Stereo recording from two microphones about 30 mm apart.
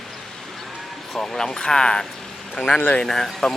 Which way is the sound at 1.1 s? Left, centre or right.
Centre.